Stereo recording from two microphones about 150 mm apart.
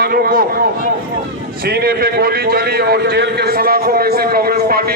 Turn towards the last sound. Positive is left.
turn(degrees=-85)